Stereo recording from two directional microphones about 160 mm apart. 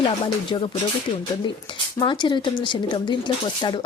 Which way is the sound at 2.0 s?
30° left (ahead or behind).